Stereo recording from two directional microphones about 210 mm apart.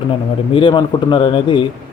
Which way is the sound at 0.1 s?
25° left (ahead or behind).